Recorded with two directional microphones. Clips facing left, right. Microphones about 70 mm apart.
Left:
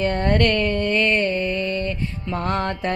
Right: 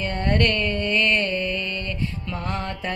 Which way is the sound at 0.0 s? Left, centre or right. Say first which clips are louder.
Left 3 dB; left.